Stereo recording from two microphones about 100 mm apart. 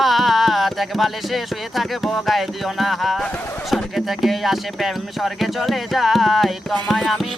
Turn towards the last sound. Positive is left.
turn(degrees=0)  # may be behind; listen again after turning